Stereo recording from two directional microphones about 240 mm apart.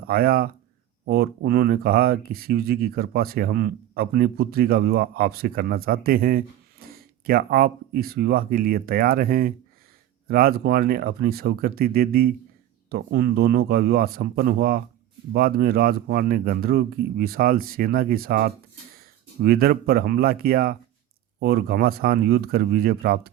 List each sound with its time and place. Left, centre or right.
0.1 s speech: right